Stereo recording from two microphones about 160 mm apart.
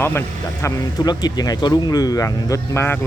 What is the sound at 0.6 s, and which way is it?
Speech, 25° left (ahead or behind).